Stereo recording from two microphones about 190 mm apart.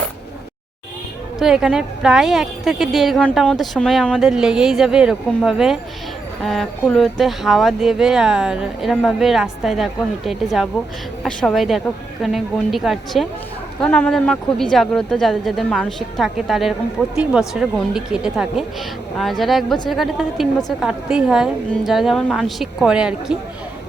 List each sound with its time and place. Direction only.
1.4 s speech: 5° right (ahead or behind)